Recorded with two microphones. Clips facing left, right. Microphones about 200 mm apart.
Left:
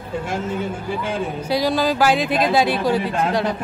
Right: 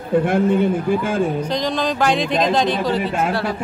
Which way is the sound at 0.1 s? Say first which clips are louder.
Right 9 dB; 60° right (ahead or behind).